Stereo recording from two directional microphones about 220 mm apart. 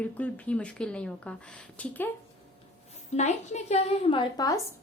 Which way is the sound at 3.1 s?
30° left (ahead or behind).